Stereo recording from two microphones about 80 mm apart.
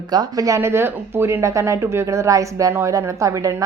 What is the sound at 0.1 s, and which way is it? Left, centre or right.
A woman's voice, right.